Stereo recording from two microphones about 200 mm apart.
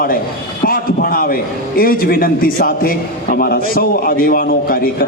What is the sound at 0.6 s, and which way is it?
A man's voice, 45° left (ahead or behind).